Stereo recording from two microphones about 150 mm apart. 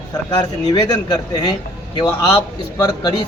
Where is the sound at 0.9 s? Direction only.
25° left (ahead or behind).